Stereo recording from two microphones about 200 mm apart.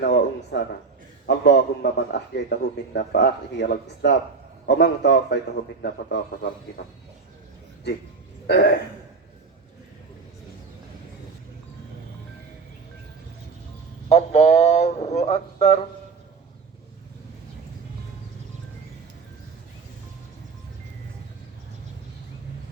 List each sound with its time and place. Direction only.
0.0 s speech: 60° left (ahead or behind)
8.4 s a sound: 50° left (ahead or behind)
14.1 s speech: 30° left (ahead or behind)